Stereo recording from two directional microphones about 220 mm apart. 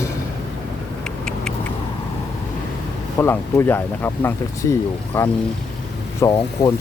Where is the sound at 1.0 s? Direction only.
5° left (ahead or behind).